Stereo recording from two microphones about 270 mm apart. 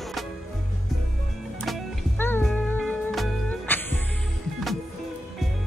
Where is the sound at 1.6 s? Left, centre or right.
Centre.